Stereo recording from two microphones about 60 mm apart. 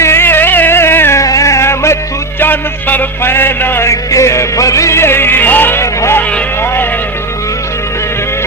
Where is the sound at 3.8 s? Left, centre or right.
Left.